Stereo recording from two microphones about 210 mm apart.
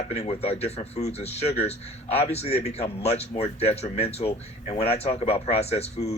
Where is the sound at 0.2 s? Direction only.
30° left (ahead or behind).